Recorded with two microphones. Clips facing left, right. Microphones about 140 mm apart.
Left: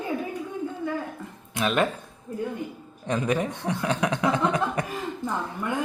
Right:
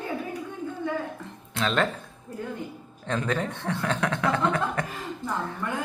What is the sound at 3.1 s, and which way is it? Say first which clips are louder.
A man's voice: left 2 dB; 15° left (ahead or behind).